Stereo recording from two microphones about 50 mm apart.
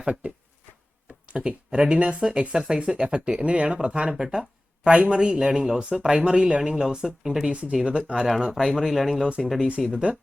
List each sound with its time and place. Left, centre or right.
1.3 s speech: right
4.1 s speech: centre
7.5 s speech: right
8.5 s speech: centre
9.9 s speech: centre